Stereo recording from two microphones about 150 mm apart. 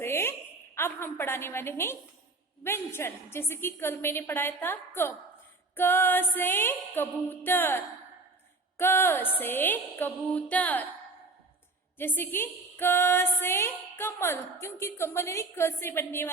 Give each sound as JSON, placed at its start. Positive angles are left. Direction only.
{"t": 0.0, "sound": "a sound", "side_deg": 15}
{"t": 0.8, "sound": "speech", "side_deg": 15}
{"t": 11.9, "sound": "speech", "side_deg": 15}